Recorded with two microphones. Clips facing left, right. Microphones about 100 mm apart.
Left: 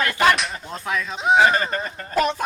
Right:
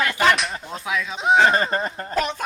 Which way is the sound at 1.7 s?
35° right (ahead or behind).